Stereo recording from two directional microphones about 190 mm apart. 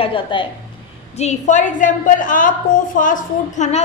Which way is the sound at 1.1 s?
40° left (ahead or behind).